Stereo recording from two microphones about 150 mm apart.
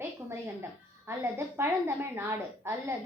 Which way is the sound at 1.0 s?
15° right (ahead or behind).